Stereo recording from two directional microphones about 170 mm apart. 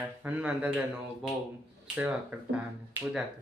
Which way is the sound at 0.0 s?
10° right (ahead or behind).